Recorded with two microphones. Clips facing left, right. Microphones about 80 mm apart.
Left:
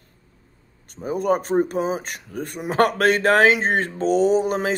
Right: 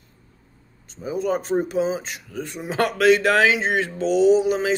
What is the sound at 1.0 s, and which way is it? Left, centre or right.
Speech, left.